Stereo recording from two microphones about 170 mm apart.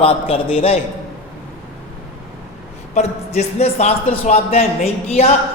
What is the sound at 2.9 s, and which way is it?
A man's voice, 40° left (ahead or behind).